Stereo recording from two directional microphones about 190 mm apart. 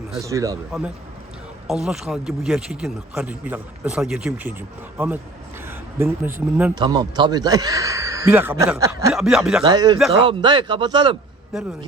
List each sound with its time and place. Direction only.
0.2 s speech: 15° right (ahead or behind)
1.6 s speech: centre (ahead or behind)
6.7 s speech: 20° right (ahead or behind)
9.1 s speech: centre (ahead or behind)
9.6 s speech: 20° right (ahead or behind)